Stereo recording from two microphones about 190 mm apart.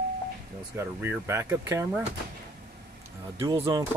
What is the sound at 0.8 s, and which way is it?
Speech, 10° right (ahead or behind).